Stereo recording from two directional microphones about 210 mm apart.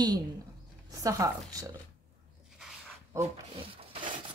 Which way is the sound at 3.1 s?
15° right (ahead or behind).